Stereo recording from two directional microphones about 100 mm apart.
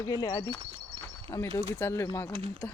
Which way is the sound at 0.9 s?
50° right (ahead or behind).